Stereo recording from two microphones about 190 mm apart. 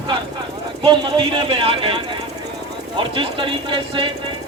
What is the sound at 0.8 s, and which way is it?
Speech, 30° right (ahead or behind).